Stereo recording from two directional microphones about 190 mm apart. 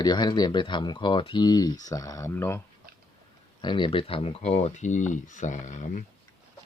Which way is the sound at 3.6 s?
25° left (ahead or behind).